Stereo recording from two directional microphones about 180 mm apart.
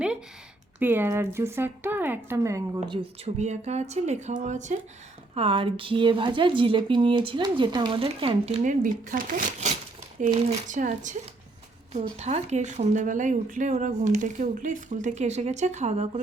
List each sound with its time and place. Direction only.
0.8 s a woman's voice: 10° right (ahead or behind)
3.3 s a woman's voice: 40° right (ahead or behind)
8.6 s a woman's voice: 45° right (ahead or behind)